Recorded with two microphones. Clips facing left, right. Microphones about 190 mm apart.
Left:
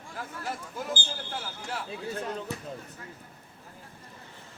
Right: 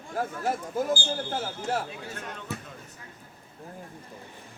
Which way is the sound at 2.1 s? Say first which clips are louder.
Left 5 dB; 35° left (ahead or behind).